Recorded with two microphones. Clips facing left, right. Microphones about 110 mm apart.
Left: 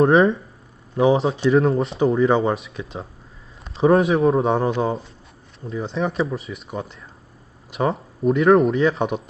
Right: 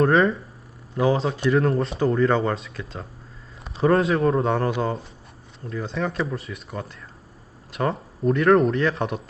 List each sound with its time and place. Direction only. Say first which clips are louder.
0.0 s speech: left 3 dB; 25° left (ahead or behind)
1.7 s speech: left 3 dB; centre (ahead or behind)
2.3 s speech: left 3 dB; 15° left (ahead or behind)
3.8 s speech: left 3 dB; centre (ahead or behind)
4.4 s speech: left 3 dB; 20° left (ahead or behind)
6.2 s speech: left 2 dB; centre (ahead or behind)
6.7 s speech: left 4 dB; 20° left (ahead or behind)
7.9 s speech: left 2 dB; 5° left (ahead or behind)